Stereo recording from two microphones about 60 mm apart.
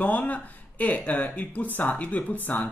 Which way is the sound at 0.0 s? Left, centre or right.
Left.